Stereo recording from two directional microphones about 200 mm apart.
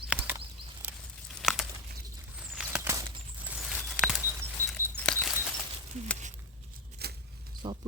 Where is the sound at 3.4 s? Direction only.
Centre (ahead or behind).